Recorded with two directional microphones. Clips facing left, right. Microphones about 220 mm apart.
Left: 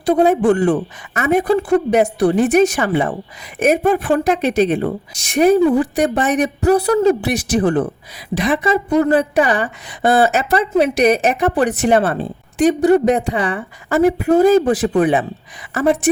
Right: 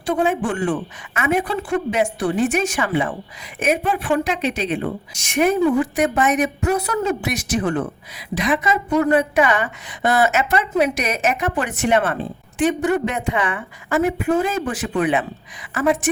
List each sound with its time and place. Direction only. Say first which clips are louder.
0.0 s a woman's voice: left 7 dB; 40° left (ahead or behind)